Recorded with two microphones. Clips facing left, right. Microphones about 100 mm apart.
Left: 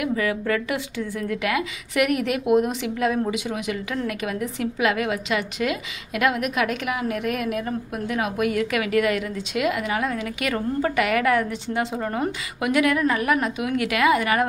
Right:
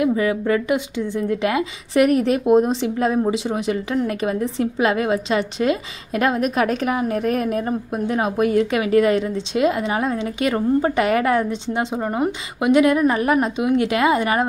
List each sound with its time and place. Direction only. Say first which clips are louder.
0.0 s a woman's voice: right 5 dB; 25° right (ahead or behind)